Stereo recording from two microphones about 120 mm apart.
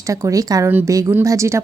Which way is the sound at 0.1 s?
30° right (ahead or behind).